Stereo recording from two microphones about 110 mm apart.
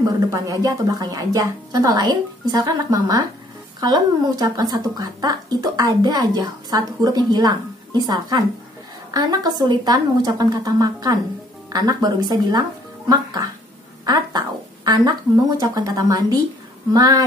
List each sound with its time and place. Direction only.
0.0 s a woman's voice: 35° right (ahead or behind)
15.6 s speech: 35° right (ahead or behind)